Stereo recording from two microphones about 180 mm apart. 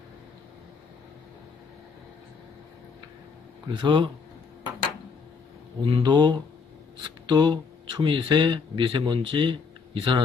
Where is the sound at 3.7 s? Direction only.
25° right (ahead or behind).